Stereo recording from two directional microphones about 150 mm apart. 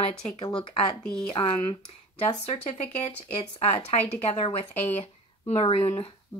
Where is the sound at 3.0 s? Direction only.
45° left (ahead or behind).